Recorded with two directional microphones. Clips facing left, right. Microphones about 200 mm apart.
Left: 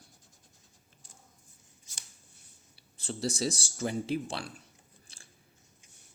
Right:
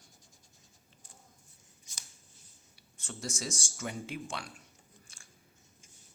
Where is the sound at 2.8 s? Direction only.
35° left (ahead or behind).